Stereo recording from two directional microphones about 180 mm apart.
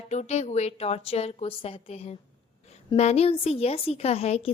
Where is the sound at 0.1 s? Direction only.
40° left (ahead or behind).